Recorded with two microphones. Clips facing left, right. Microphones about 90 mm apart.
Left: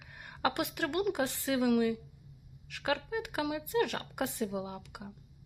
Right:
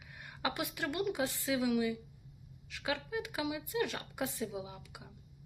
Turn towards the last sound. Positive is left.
turn(degrees=50)  # may be behind; listen again after turning